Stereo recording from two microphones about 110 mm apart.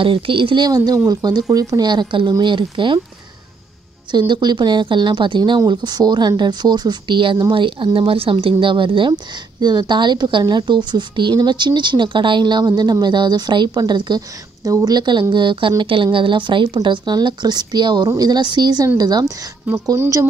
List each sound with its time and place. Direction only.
0.0 s speech: 50° right (ahead or behind)
0.7 s a woman's voice: 35° right (ahead or behind)
4.1 s a woman's voice: 40° right (ahead or behind)